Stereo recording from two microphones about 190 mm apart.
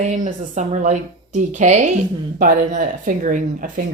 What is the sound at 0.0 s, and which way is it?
Speech, 40° right (ahead or behind).